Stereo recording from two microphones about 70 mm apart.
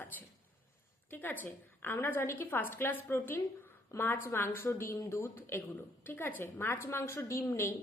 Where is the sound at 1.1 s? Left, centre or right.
Left.